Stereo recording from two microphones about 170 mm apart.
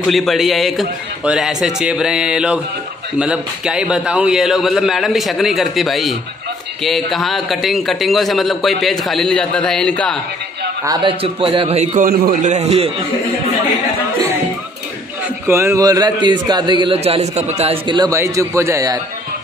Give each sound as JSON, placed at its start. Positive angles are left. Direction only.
{"t": 0.0, "sound": "a man's voice", "side_deg": 0}
{"t": 10.9, "sound": "a man's voice", "side_deg": -30}
{"t": 15.2, "sound": "a man's voice", "side_deg": -15}